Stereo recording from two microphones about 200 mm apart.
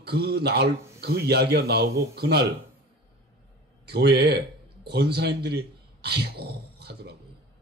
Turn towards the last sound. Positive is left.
turn(degrees=-55)  # may be behind; listen again after turning